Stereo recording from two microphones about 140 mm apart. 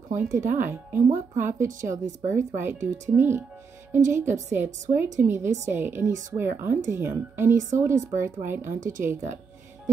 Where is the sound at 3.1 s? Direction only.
15° right (ahead or behind).